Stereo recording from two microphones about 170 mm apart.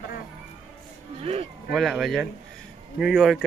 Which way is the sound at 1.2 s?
35° right (ahead or behind).